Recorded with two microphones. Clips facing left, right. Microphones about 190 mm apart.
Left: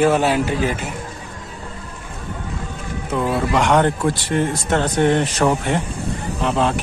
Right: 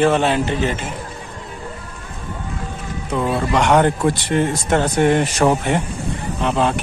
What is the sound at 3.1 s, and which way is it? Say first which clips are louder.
Speech: even; centre (ahead or behind).